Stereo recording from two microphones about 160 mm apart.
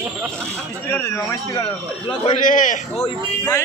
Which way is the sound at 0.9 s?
15° left (ahead or behind).